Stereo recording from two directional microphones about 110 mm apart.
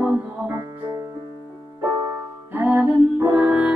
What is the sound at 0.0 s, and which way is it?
Music, 25° right (ahead or behind).